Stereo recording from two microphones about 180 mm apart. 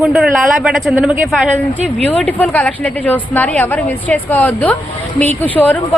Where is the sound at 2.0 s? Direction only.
10° left (ahead or behind).